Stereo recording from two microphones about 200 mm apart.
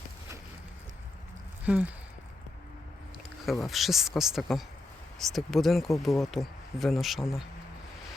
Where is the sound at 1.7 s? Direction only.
5° right (ahead or behind).